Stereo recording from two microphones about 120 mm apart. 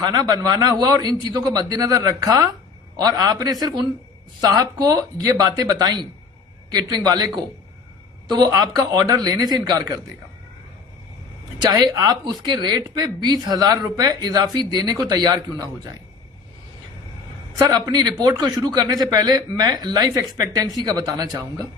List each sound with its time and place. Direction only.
0.0 s speech: 35° right (ahead or behind)
8.3 s speech: 35° right (ahead or behind)
11.6 s speech: 35° right (ahead or behind)
17.6 s speech: 30° right (ahead or behind)